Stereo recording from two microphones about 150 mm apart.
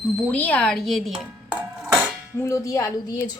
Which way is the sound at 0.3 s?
10° left (ahead or behind).